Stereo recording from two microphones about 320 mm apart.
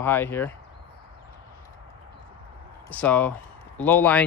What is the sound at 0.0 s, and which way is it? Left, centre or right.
Speech, centre.